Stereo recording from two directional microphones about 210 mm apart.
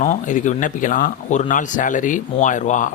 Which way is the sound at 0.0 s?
35° left (ahead or behind).